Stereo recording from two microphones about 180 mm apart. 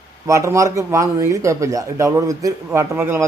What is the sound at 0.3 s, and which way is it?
Speech, 15° right (ahead or behind).